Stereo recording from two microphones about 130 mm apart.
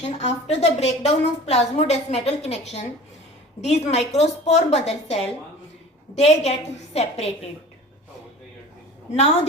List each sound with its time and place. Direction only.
0.0 s a woman's voice: 55° left (ahead or behind)
9.1 s a woman's voice: 55° left (ahead or behind)